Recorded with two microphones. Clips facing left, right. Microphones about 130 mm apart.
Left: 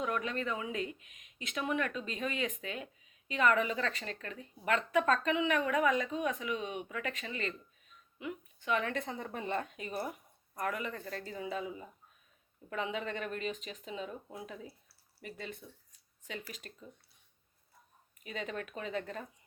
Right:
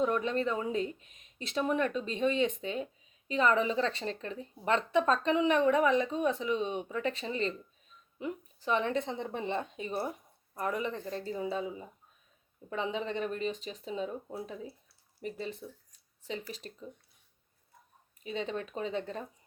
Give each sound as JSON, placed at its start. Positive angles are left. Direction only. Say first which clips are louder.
{"t": 0.0, "sound": "speech", "louder": "right 6 dB", "side_deg": -30}
{"t": 14.5, "sound": "speech", "louder": "right 4 dB", "side_deg": -25}
{"t": 18.2, "sound": "speech", "louder": "right 4 dB", "side_deg": -30}